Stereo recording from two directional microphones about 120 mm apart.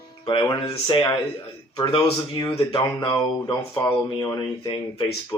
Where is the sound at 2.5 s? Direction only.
45° left (ahead or behind).